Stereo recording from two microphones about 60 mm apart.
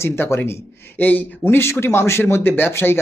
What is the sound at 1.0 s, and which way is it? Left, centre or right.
Speech, left.